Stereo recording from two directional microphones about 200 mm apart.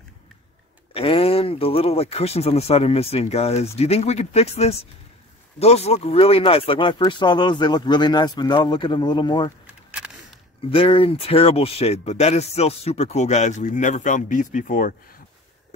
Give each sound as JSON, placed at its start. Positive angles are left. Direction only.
{"t": 0.9, "sound": "speech", "side_deg": 30}
{"t": 9.8, "sound": "a sound", "side_deg": -5}
{"t": 10.7, "sound": "speech", "side_deg": 25}